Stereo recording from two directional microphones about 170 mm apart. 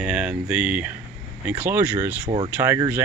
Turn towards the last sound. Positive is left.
turn(degrees=-15)  # may be behind; listen again after turning